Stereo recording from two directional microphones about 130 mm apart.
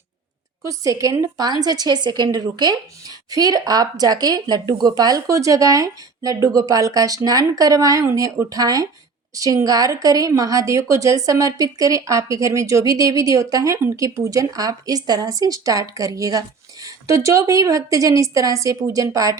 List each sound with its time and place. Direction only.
0.6 s a woman's voice: 25° right (ahead or behind)